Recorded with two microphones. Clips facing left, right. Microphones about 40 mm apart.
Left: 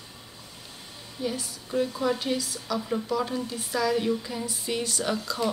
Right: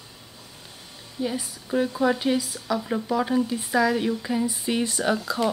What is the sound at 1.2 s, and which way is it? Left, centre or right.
A woman's voice, centre.